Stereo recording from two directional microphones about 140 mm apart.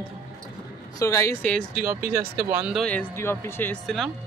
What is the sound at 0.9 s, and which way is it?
Speech, 20° left (ahead or behind).